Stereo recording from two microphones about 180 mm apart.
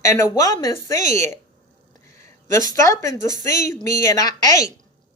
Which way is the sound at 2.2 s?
20° left (ahead or behind).